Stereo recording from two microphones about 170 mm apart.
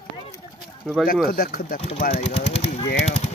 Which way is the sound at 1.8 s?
40° left (ahead or behind).